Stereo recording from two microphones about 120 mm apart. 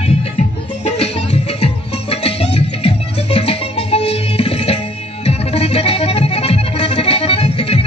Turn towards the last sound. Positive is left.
turn(degrees=55)  # may be behind; listen again after turning